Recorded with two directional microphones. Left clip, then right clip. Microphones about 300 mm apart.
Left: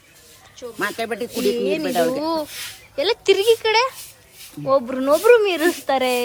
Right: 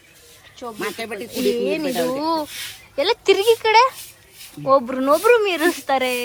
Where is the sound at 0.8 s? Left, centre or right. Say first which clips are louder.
Left 5 dB; left.